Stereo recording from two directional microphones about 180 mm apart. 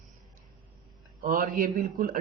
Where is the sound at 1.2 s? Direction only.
50° right (ahead or behind).